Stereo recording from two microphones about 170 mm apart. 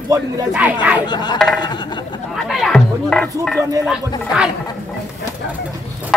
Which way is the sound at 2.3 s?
Centre (ahead or behind).